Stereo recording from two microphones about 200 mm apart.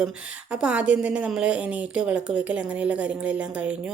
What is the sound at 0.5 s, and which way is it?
A woman's voice, 5° right (ahead or behind).